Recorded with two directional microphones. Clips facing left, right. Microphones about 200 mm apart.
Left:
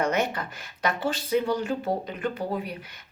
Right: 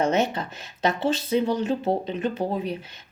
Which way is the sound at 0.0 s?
25° right (ahead or behind).